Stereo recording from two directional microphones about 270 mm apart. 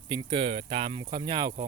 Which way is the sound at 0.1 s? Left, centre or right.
Centre.